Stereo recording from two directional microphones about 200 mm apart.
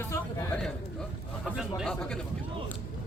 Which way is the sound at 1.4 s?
Centre (ahead or behind).